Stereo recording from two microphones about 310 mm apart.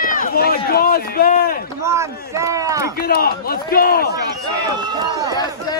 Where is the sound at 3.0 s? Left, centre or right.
Left.